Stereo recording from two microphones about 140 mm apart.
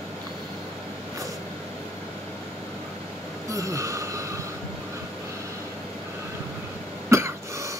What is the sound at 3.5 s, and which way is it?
Train, 25° right (ahead or behind).